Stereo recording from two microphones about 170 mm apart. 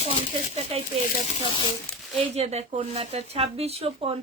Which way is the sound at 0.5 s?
35° right (ahead or behind).